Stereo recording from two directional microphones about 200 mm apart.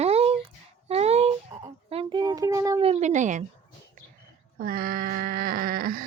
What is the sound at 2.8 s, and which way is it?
Speech, 35° right (ahead or behind).